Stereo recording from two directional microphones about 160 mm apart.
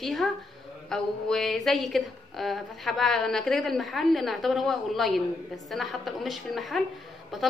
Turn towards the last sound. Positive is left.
turn(degrees=0)  # may be behind; listen again after turning